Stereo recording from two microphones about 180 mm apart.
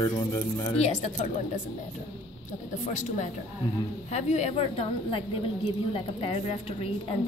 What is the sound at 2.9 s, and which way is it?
Speech, 45° left (ahead or behind).